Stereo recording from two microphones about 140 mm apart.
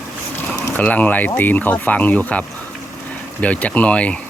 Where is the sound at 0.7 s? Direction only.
10° left (ahead or behind).